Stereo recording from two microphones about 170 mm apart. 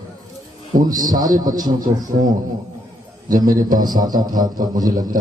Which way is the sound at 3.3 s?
55° right (ahead or behind).